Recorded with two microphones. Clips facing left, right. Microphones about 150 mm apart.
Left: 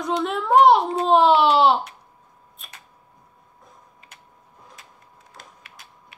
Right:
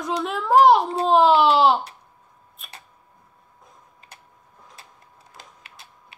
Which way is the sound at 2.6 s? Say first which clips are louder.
Right 2 dB; centre (ahead or behind).